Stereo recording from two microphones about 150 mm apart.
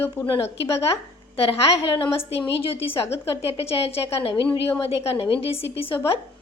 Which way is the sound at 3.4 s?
40° left (ahead or behind).